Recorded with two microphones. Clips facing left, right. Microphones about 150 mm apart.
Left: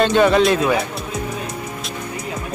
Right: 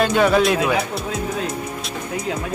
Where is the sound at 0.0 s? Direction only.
5° right (ahead or behind).